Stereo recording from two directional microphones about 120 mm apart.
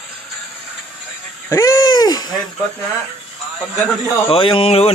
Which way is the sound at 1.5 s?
25° left (ahead or behind).